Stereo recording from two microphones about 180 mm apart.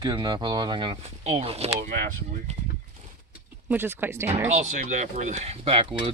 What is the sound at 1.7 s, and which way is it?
Speech, 45° right (ahead or behind).